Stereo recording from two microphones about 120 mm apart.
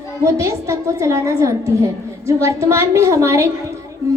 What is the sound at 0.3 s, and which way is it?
A woman's voice, 25° right (ahead or behind).